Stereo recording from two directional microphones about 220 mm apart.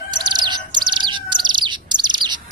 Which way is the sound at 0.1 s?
20° right (ahead or behind).